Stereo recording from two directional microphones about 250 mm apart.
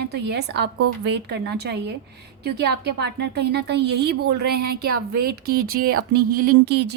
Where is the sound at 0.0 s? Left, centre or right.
Right.